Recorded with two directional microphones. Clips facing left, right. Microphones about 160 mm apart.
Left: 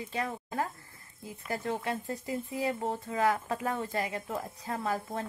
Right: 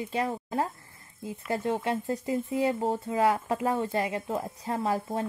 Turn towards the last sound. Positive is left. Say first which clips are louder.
# right 4 dB
turn(degrees=-25)  # may be behind; listen again after turning